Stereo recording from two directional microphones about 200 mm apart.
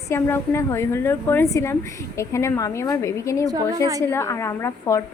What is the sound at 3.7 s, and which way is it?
Speech, 15° right (ahead or behind).